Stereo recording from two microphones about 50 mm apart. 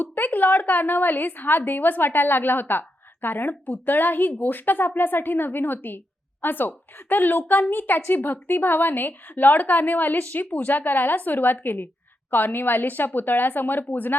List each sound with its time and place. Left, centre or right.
0.0 s a woman's voice: left